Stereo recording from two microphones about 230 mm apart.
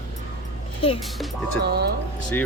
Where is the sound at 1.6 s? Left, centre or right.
Right.